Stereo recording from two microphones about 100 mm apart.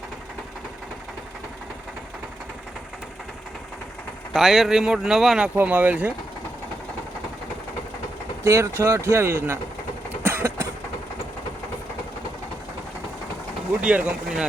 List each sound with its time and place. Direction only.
4.3 s speech: centre (ahead or behind)
5.5 s speech: 15° right (ahead or behind)
8.4 s speech: 30° right (ahead or behind)
10.2 s vehicle: 25° right (ahead or behind)
13.8 s speech: 10° right (ahead or behind)